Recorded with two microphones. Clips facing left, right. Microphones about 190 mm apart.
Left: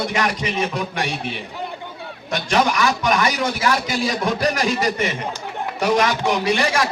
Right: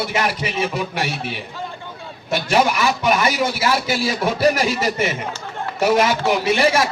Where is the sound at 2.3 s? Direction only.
5° right (ahead or behind).